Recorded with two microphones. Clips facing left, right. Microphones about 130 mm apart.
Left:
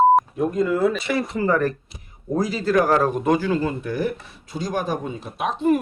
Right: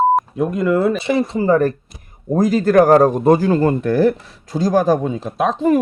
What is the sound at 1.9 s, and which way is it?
A man's voice, 50° right (ahead or behind).